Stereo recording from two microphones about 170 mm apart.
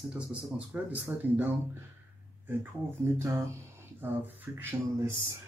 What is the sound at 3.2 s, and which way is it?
Speech, 15° right (ahead or behind).